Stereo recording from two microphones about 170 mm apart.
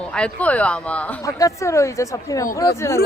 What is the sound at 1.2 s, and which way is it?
Speech, 20° left (ahead or behind).